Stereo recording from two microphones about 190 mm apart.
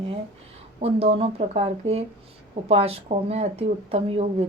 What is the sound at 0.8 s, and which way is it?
A woman's voice, 30° right (ahead or behind).